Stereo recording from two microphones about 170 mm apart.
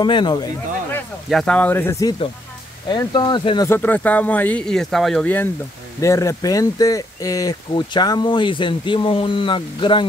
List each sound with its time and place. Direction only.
0.0 s speech: 25° left (ahead or behind)
1.3 s speech: 5° left (ahead or behind); by 3.6 s 25° left (ahead or behind)
3.6 s speech: 10° left (ahead or behind); by 10.0 s 30° left (ahead or behind)